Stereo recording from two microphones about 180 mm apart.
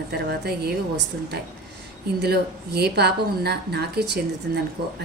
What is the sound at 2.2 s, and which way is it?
A woman's voice, 65° right (ahead or behind).